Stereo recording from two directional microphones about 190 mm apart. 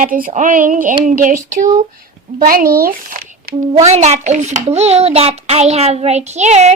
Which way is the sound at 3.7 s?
35° right (ahead or behind).